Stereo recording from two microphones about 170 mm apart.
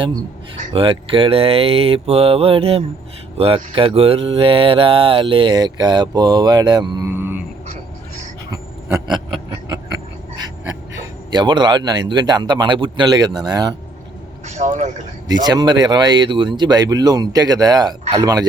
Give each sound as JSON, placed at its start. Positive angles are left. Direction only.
{"t": 0.7, "sound": "speech", "side_deg": -30}
{"t": 7.1, "sound": "a sound", "side_deg": -15}
{"t": 10.9, "sound": "speech", "side_deg": -25}
{"t": 14.4, "sound": "speech", "side_deg": -40}
{"t": 15.3, "sound": "speech", "side_deg": -25}